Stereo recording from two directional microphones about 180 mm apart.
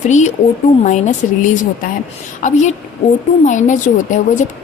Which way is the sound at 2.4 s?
40° left (ahead or behind).